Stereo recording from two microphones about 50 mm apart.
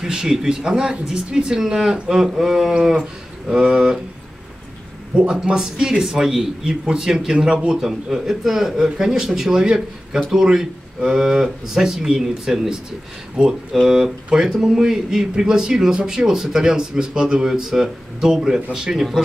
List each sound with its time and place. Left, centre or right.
0.0 s speech: centre
5.1 s speech: centre
13.7 s speech: centre